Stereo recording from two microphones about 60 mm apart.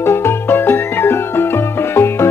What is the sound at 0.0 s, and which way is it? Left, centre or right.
Music, left.